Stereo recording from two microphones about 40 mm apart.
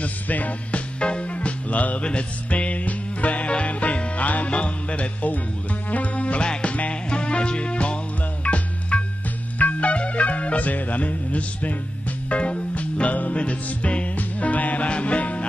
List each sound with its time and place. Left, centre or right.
0.0 s music: left
2.0 s music: left
8.9 s music: left